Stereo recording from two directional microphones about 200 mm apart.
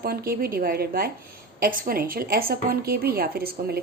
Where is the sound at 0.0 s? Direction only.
50° right (ahead or behind).